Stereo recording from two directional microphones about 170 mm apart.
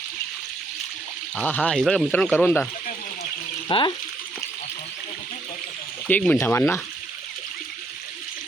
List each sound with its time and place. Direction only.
1.4 s speech: 10° left (ahead or behind)
3.7 s speech: 30° left (ahead or behind)
6.1 s speech: 10° left (ahead or behind)